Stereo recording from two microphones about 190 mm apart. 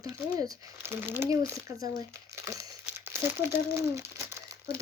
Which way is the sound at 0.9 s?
10° right (ahead or behind).